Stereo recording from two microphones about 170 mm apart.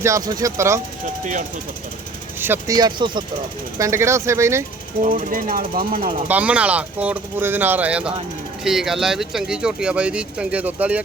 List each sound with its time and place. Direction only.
0.0 s speech: 20° right (ahead or behind)
2.4 s speech: 15° right (ahead or behind)
5.1 s speech: 55° right (ahead or behind)
6.2 s speech: 10° right (ahead or behind)